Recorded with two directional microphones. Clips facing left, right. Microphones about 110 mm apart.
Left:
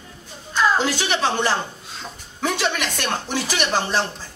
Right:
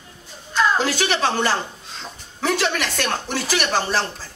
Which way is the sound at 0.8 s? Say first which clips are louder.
Right 1 dB; 15° left (ahead or behind).